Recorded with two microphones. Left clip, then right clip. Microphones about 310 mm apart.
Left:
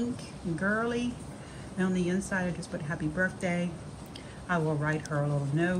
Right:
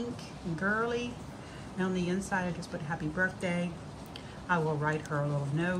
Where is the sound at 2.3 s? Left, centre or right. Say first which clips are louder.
Left 1 dB; centre.